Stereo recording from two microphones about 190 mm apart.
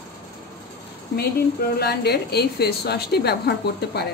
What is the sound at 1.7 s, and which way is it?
A woman's voice, 60° left (ahead or behind).